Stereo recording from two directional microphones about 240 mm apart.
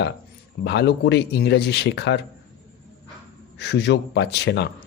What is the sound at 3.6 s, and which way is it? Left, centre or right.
Speech, left.